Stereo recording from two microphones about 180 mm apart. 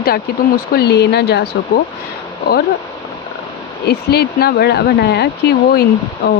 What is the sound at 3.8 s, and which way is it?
Speech, 65° left (ahead or behind).